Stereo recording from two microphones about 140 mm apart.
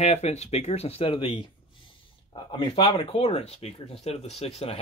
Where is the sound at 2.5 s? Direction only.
40° left (ahead or behind).